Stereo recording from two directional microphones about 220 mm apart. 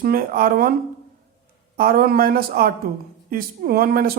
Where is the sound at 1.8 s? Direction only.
40° right (ahead or behind).